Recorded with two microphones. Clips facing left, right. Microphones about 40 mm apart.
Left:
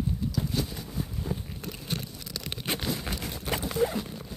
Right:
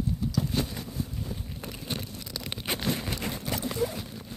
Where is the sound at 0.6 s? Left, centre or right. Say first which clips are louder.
Right 1 dB; right.